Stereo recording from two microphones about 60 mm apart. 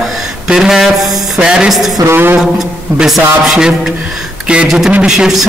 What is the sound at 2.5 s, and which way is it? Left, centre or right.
A man's voice, centre.